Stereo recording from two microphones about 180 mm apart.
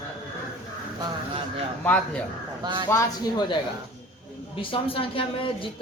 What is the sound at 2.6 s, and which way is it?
Speech, 25° right (ahead or behind).